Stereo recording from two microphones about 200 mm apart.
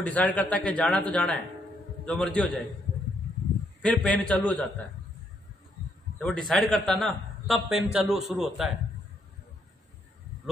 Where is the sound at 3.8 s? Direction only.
5° left (ahead or behind).